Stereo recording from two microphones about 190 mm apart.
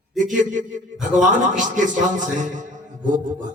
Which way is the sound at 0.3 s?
40° right (ahead or behind).